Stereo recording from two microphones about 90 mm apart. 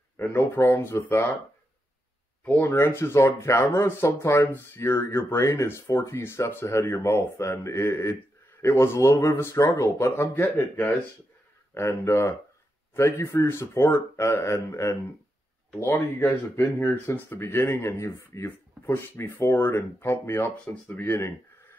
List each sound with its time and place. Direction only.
0.2 s speech: 20° left (ahead or behind)
2.4 s speech: 15° left (ahead or behind)
3.0 s speech: 30° left (ahead or behind)